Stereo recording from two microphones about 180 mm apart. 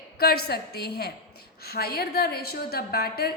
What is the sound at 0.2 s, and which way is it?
A woman's voice, 60° left (ahead or behind).